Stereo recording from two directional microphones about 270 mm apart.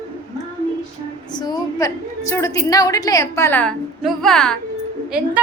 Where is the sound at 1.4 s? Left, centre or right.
Centre.